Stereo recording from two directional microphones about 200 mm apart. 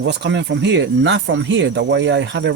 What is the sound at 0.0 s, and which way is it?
Speech, 60° right (ahead or behind).